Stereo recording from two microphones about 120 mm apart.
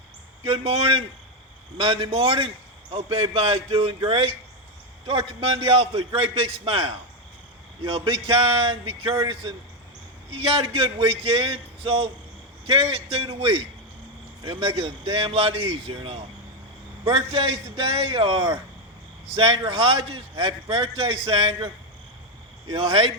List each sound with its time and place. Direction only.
0.4 s a man's voice: 50° right (ahead or behind)
22.7 s a man's voice: 50° right (ahead or behind)